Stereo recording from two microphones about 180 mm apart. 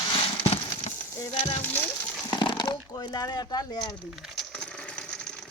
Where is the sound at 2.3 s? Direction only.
25° left (ahead or behind).